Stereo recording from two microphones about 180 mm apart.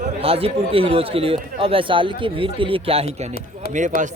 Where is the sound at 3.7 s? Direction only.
45° right (ahead or behind).